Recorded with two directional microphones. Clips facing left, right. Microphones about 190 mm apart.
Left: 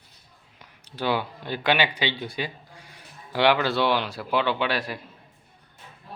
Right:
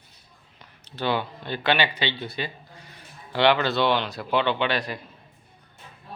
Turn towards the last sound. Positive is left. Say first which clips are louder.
# right 1 dB
turn(degrees=5)  # may be behind; listen again after turning